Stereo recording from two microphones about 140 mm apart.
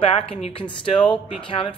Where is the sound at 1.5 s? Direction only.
40° left (ahead or behind).